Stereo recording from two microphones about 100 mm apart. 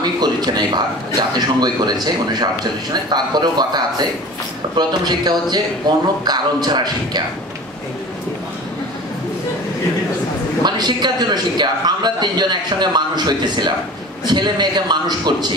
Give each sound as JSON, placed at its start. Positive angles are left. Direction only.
{"t": 0.0, "sound": "a man's voice", "side_deg": -45}
{"t": 10.6, "sound": "a man's voice", "side_deg": -45}